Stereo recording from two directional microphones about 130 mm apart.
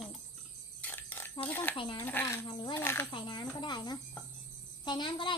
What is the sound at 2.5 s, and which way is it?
Speech, 40° left (ahead or behind).